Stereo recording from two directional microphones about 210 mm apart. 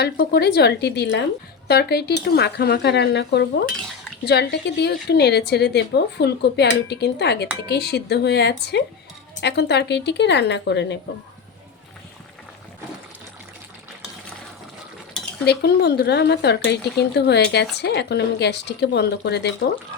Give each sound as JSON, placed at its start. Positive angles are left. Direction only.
{"t": 0.0, "sound": "a woman's voice", "side_deg": 50}
{"t": 15.4, "sound": "a woman's voice", "side_deg": 50}